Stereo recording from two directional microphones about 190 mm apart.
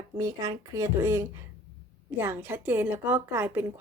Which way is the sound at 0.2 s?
20° right (ahead or behind).